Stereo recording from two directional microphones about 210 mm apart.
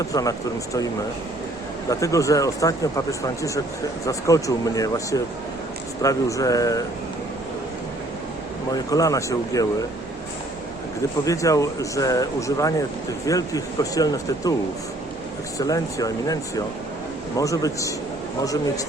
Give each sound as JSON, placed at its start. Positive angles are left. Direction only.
{"t": 0.1, "sound": "speech", "side_deg": 15}
{"t": 1.9, "sound": "speech", "side_deg": 15}
{"t": 8.7, "sound": "speech", "side_deg": 15}
{"t": 11.3, "sound": "speech", "side_deg": 15}
{"t": 15.5, "sound": "speech", "side_deg": 15}